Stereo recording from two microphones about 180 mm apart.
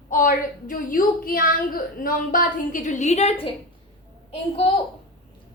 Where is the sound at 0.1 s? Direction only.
50° left (ahead or behind).